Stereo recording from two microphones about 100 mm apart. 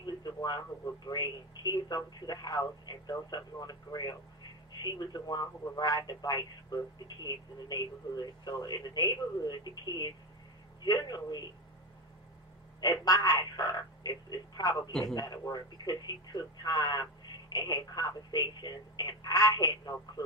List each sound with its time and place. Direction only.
0.0 s a sound: 40° left (ahead or behind)
1.0 s speech: 45° left (ahead or behind)
12.8 s speech: 40° left (ahead or behind)
14.9 s a man's voice: 5° left (ahead or behind)
15.4 s speech: 40° left (ahead or behind)